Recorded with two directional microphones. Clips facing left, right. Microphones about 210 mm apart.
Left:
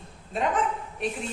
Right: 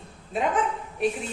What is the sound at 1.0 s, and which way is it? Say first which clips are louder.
Speech: right 6 dB; centre (ahead or behind).